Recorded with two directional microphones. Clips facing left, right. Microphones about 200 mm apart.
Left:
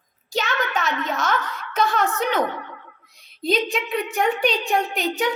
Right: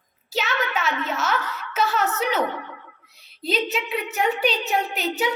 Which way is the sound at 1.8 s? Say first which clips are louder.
Left 2 dB; 5° right (ahead or behind).